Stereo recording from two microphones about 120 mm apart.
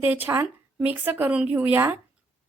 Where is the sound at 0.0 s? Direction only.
15° right (ahead or behind).